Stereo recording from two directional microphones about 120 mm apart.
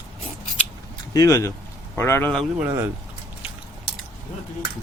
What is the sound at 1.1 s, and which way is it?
Speech, 30° left (ahead or behind).